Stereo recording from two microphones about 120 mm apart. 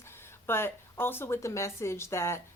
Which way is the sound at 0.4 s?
20° left (ahead or behind).